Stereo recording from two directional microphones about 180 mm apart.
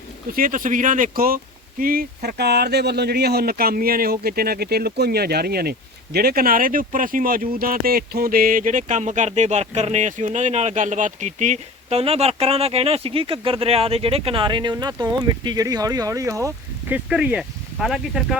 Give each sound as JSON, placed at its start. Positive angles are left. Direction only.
{"t": 0.3, "sound": "speech", "side_deg": -50}
{"t": 16.9, "sound": "speech", "side_deg": -5}